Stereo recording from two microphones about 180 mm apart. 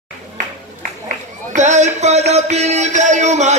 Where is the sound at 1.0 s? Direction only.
45° right (ahead or behind).